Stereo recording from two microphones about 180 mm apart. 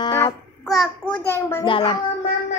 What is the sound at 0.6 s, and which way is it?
A child's voice, centre (ahead or behind).